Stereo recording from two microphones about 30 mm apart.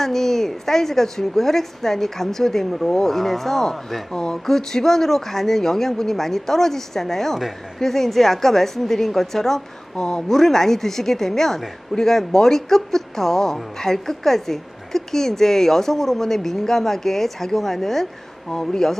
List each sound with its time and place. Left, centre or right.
0.0 s a woman's voice: centre
4.1 s a woman's voice: left
9.9 s speech: left
10.3 s a woman's voice: centre